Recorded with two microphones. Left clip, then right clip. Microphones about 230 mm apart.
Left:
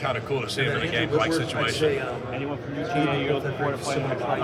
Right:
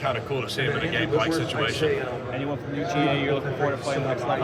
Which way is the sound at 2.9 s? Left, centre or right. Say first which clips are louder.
Right 1 dB; right.